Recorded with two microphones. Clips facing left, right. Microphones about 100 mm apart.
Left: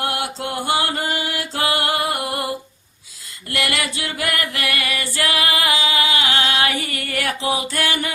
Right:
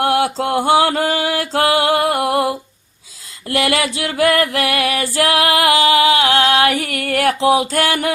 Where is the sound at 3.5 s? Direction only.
90° right.